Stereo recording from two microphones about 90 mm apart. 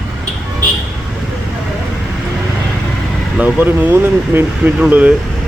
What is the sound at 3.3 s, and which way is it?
Speech, 20° right (ahead or behind).